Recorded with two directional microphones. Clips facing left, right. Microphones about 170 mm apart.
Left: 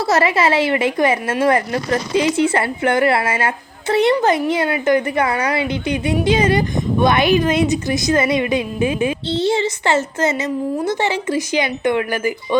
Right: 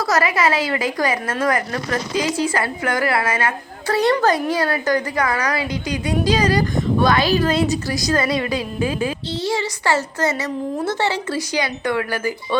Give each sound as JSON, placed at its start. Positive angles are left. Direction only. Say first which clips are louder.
{"t": 0.0, "sound": "a woman's voice", "louder": "left 3 dB", "side_deg": 25}